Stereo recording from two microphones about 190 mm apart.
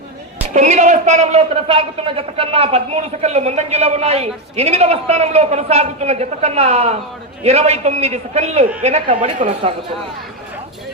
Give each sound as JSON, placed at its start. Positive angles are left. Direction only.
{"t": 0.5, "sound": "a man's voice", "side_deg": -40}